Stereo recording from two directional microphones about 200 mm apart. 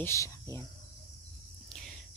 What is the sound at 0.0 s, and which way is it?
Cricket, 15° left (ahead or behind).